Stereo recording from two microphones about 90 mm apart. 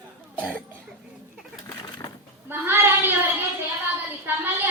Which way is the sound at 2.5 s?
25° right (ahead or behind).